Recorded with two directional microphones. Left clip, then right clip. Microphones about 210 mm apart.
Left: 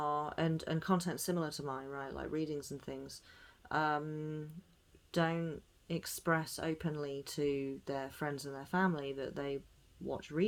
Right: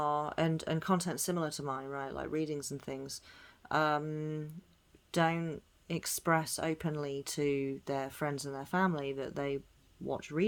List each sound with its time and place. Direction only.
0.0 s speech: 30° right (ahead or behind)